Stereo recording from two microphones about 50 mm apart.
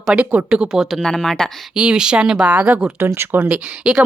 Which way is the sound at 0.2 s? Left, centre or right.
Right.